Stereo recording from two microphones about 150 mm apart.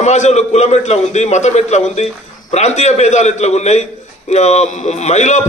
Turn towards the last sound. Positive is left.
turn(degrees=50)  # may be behind; listen again after turning